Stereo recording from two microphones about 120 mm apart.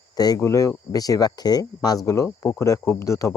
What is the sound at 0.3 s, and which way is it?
Speech, 25° left (ahead or behind).